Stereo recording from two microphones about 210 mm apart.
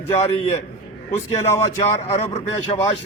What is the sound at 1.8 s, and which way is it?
Speech, 30° left (ahead or behind).